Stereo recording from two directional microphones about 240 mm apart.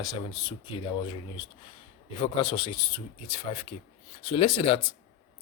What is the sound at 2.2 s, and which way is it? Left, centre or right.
Speech, left.